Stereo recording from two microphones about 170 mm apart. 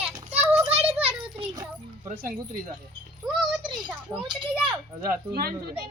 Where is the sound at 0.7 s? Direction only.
35° right (ahead or behind).